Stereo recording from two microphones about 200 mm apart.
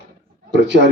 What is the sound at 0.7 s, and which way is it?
Speech, 60° right (ahead or behind).